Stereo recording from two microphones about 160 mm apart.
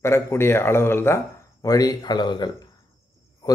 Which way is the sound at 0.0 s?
15° left (ahead or behind).